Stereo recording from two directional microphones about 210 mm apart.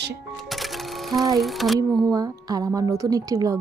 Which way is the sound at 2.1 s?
15° right (ahead or behind).